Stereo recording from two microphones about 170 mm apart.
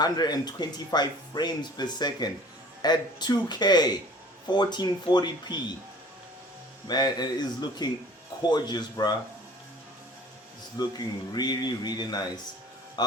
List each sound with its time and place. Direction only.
0.0 s speech: 25° left (ahead or behind)
6.8 s speech: 25° left (ahead or behind)
10.8 s a man's voice: 25° left (ahead or behind)